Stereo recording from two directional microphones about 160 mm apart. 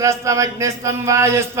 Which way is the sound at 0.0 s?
20° right (ahead or behind).